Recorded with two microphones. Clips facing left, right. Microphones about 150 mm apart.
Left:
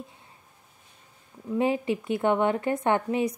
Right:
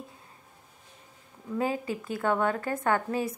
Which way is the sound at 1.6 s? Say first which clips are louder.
Left 5 dB; 25° left (ahead or behind).